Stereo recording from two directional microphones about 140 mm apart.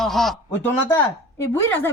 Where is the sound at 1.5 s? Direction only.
15° left (ahead or behind).